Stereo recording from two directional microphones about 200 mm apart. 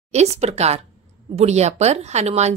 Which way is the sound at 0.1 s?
35° right (ahead or behind).